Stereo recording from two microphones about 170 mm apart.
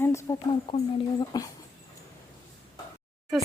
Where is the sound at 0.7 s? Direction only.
25° left (ahead or behind).